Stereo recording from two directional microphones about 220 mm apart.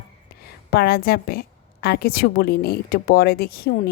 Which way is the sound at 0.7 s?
45° left (ahead or behind).